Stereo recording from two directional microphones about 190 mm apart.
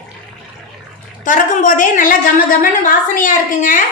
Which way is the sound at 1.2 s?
40° left (ahead or behind).